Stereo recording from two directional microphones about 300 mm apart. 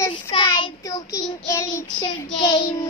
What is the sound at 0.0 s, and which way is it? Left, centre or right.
Child singing, centre.